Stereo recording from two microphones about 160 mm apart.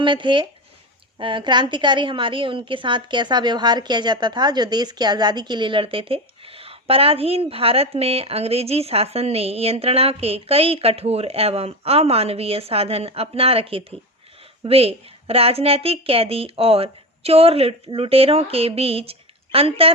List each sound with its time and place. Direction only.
0.0 s a woman's voice: 30° right (ahead or behind)